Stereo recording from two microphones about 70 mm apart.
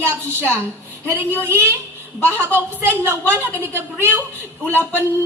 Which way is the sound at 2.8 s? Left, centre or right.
Right.